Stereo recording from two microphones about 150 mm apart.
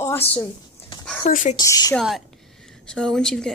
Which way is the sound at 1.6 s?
25° left (ahead or behind).